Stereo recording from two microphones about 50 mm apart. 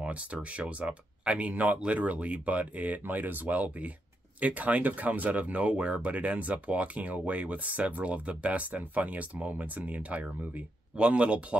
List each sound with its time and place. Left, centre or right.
0.0 s speech: right
1.5 s speech: right